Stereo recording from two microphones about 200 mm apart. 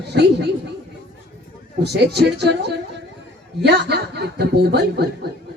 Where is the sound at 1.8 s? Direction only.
55° right (ahead or behind).